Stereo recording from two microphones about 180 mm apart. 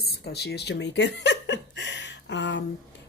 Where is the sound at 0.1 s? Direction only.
65° left (ahead or behind).